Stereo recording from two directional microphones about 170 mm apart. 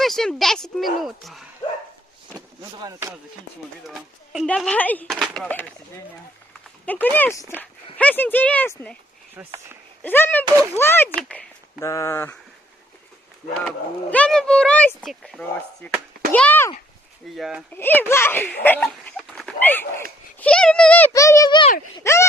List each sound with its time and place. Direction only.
0.0 s speech: centre (ahead or behind)
2.7 s speech: 20° right (ahead or behind)
3.8 s speech: 5° right (ahead or behind)
9.3 s speech: 15° right (ahead or behind)
10.0 s speech: 10° left (ahead or behind)
13.7 s speech: 5° left (ahead or behind)
17.3 s speech: centre (ahead or behind)
17.7 s a child's voice: 10° left (ahead or behind)
21.1 s speech: 20° left (ahead or behind)